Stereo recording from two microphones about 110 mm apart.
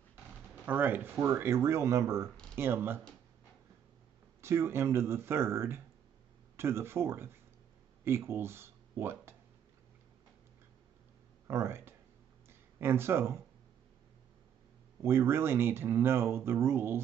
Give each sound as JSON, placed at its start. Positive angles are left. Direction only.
{"t": 0.1, "sound": "drawer open or close", "side_deg": -15}
{"t": 1.2, "sound": "speech", "side_deg": -25}
{"t": 2.2, "sound": "a sound", "side_deg": 10}
{"t": 2.5, "sound": "speech", "side_deg": -20}
{"t": 4.4, "sound": "speech", "side_deg": -25}
{"t": 11.4, "sound": "speech", "side_deg": -25}
{"t": 15.0, "sound": "speech", "side_deg": -25}